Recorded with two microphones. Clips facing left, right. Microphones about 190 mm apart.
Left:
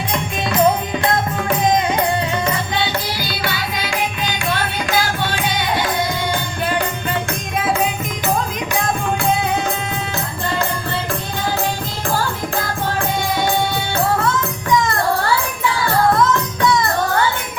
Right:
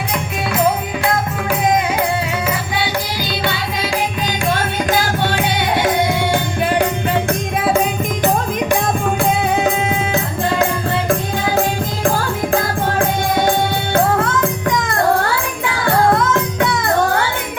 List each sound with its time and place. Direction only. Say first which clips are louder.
0.6 s music: left 2 dB; 5° right (ahead or behind)
3.4 s music: right 1 dB; 25° right (ahead or behind)
4.3 s music: right 3 dB; 45° right (ahead or behind)
13.0 s music: right 3 dB; 50° right (ahead or behind)
15.6 s music: right 2 dB; 55° right (ahead or behind)